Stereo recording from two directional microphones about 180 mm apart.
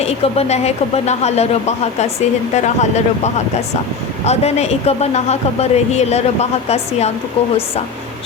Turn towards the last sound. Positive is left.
turn(degrees=35)  # may be behind; listen again after turning